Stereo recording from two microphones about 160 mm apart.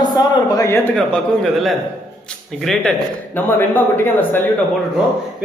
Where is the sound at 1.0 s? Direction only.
5° left (ahead or behind).